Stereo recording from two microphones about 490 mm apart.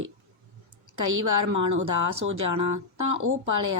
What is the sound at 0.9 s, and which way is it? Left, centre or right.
Speech, right.